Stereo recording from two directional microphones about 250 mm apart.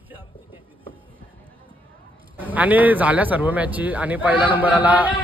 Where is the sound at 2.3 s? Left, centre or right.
Centre.